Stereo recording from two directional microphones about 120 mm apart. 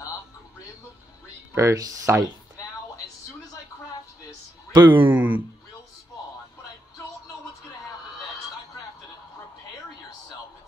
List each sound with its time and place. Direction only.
1.5 s speech: 25° right (ahead or behind)
4.7 s speech: 35° right (ahead or behind)
5.0 s speech: 15° right (ahead or behind)